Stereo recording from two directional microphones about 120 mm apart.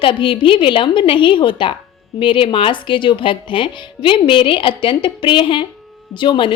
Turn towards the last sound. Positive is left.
turn(degrees=45)  # may be behind; listen again after turning